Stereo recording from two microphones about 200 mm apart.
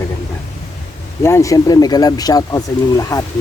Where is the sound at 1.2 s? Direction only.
15° left (ahead or behind).